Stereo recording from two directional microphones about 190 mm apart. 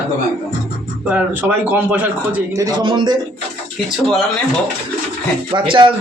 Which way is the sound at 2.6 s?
25° right (ahead or behind).